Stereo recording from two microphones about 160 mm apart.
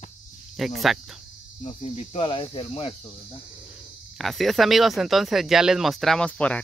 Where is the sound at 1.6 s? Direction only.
40° left (ahead or behind).